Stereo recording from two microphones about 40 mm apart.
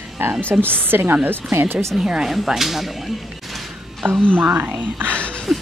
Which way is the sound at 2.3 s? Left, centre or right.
Centre.